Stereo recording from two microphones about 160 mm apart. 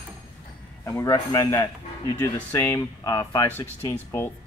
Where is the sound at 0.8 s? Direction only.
20° left (ahead or behind).